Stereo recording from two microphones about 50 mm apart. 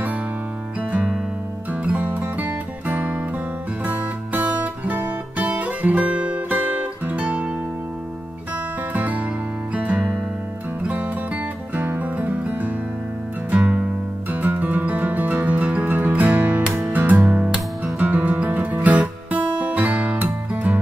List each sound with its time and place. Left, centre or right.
1.7 s music: right
8.9 s music: right